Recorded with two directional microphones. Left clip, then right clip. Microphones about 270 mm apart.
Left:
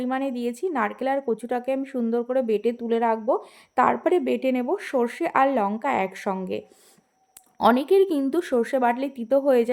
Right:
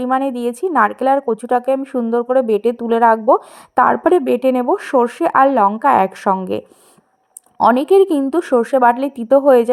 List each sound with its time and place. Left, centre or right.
0.0 s a woman's voice: centre
7.6 s a woman's voice: centre